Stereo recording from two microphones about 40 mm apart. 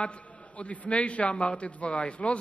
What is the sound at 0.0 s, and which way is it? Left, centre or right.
A man's voice, left.